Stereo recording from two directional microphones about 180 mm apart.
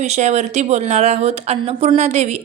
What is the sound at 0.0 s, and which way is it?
A woman's voice, 40° right (ahead or behind).